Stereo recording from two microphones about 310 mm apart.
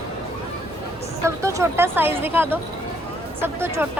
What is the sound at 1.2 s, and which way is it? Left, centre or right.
Speech, centre.